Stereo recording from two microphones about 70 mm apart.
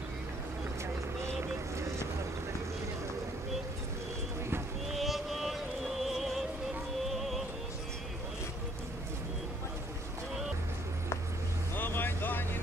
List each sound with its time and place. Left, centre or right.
1.2 s vehicle: right
4.9 s a sound: centre
6.0 s music: centre
11.7 s vehicle: left